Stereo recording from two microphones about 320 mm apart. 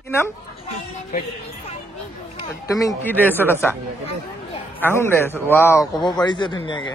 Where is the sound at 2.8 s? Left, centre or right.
Centre.